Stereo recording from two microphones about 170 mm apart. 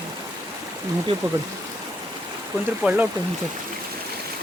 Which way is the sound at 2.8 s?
10° right (ahead or behind).